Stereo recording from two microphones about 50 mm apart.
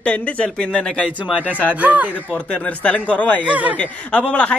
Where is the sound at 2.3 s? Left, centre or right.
Left.